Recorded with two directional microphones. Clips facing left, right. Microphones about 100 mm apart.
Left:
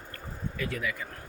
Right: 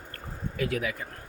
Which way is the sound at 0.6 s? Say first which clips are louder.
Right 4 dB; 60° right (ahead or behind).